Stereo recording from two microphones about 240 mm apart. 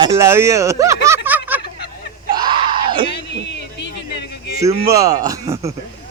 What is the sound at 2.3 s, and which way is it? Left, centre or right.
Screaming, right.